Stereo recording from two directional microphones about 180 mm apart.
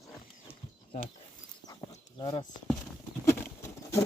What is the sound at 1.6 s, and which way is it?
Livestock, 20° left (ahead or behind).